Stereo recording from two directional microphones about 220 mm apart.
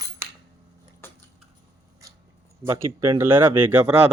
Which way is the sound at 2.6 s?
15° right (ahead or behind).